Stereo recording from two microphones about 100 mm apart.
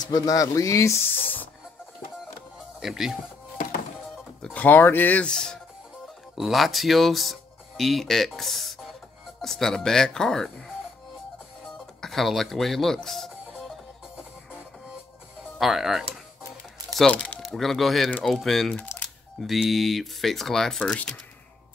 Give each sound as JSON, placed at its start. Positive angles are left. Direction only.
{"t": 0.1, "sound": "speech", "side_deg": 35}
{"t": 2.8, "sound": "speech", "side_deg": -5}
{"t": 4.6, "sound": "speech", "side_deg": 20}
{"t": 12.0, "sound": "music", "side_deg": 0}
{"t": 15.5, "sound": "speech", "side_deg": 0}
{"t": 17.1, "sound": "speech", "side_deg": 10}